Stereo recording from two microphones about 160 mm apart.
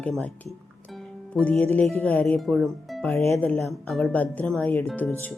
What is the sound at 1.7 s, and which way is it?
Speech, 10° left (ahead or behind).